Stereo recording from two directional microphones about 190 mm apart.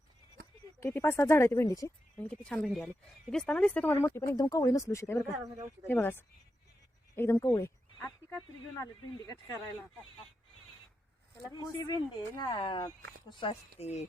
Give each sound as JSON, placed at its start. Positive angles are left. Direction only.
{"t": 0.8, "sound": "speech", "side_deg": 10}
{"t": 2.1, "sound": "a woman's voice", "side_deg": 5}
{"t": 5.4, "sound": "speech", "side_deg": -15}
{"t": 5.9, "sound": "speech", "side_deg": 10}
{"t": 11.5, "sound": "speech", "side_deg": 20}